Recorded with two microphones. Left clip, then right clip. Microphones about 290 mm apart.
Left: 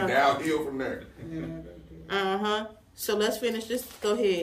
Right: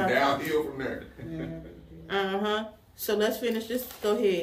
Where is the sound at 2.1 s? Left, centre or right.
Centre.